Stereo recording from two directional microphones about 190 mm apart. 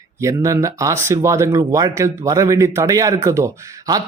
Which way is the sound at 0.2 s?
15° right (ahead or behind).